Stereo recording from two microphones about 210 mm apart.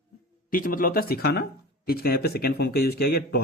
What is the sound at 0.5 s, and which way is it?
Speech, 40° left (ahead or behind).